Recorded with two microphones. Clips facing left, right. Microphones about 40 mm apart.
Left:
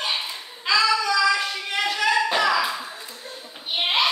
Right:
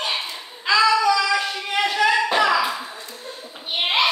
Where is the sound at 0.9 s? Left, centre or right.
Centre.